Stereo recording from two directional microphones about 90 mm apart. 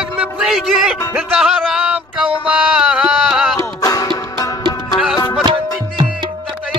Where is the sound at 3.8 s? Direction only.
40° left (ahead or behind).